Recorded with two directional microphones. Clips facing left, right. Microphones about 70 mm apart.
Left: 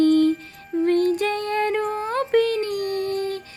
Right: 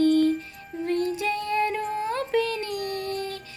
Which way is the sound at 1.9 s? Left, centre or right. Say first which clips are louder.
Left 5 dB; left.